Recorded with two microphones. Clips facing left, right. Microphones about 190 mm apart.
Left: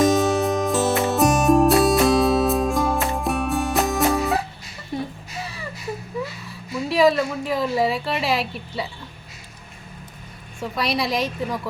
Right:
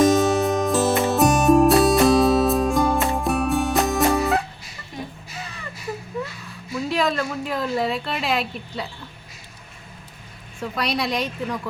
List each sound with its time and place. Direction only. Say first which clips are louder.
0.0 s music: right 1 dB; centre (ahead or behind)
4.9 s music: left 6 dB; 35° left (ahead or behind)
6.8 s speech: left 5 dB; centre (ahead or behind)
10.6 s a woman's voice: left 1 dB; centre (ahead or behind)